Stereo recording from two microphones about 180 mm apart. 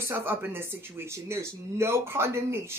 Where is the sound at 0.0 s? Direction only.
15° right (ahead or behind).